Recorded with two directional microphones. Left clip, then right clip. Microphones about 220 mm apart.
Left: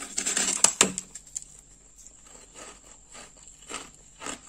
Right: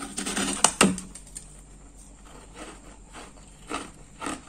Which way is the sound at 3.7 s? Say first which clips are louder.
Right 5 dB; 20° left (ahead or behind).